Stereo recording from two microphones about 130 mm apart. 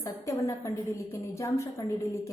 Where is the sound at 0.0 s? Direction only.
25° left (ahead or behind).